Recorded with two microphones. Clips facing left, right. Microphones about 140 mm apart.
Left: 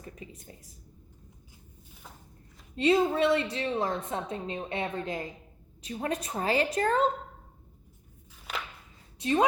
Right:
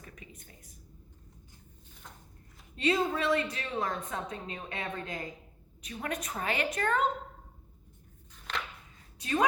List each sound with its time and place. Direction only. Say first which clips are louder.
0.0 s a woman's voice: left 6 dB; 30° left (ahead or behind)
2.7 s a woman's voice: left 5 dB; 25° left (ahead or behind)
9.1 s speech: left 5 dB; 25° left (ahead or behind)